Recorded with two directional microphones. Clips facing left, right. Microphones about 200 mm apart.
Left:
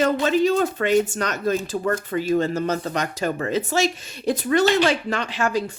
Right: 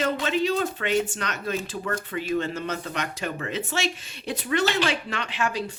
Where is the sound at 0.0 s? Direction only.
45° left (ahead or behind).